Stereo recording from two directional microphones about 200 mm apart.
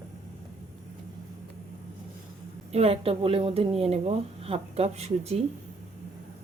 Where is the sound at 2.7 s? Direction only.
30° right (ahead or behind).